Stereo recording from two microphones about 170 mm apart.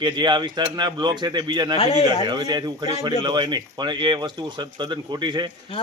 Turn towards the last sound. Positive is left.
turn(degrees=-25)  # may be behind; listen again after turning